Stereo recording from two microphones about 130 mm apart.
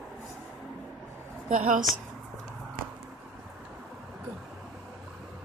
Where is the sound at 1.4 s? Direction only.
85° right.